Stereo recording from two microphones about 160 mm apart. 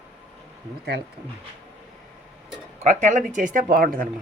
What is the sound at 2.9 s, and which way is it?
Speech, 50° right (ahead or behind).